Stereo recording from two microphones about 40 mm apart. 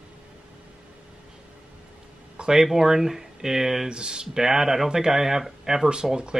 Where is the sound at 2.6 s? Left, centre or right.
Centre.